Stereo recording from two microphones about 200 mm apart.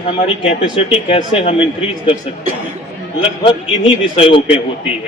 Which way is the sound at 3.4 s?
25° left (ahead or behind).